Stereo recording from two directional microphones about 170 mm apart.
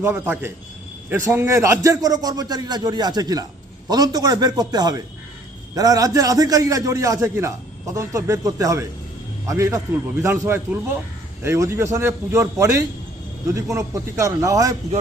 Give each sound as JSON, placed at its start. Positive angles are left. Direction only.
{"t": 0.0, "sound": "a man's voice", "side_deg": -15}